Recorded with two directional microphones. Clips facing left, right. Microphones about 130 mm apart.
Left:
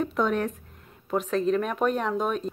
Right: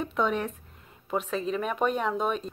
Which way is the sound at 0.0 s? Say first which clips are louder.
Left 2 dB; centre (ahead or behind).